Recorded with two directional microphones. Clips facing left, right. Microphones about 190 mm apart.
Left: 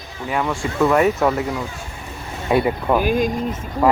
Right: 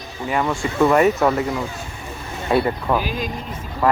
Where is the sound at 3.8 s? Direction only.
15° left (ahead or behind).